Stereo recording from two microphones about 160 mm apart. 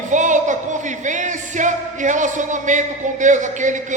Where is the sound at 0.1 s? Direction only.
50° right (ahead or behind).